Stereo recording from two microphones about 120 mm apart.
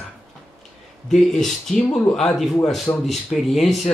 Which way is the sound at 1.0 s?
5° left (ahead or behind).